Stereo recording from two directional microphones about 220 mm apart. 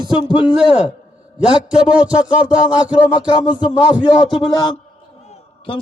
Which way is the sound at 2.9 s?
20° left (ahead or behind).